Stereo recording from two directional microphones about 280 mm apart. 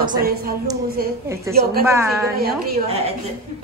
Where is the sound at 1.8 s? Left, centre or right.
Centre.